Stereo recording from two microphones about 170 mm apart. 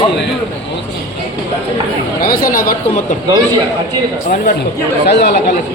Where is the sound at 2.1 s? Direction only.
60° left (ahead or behind).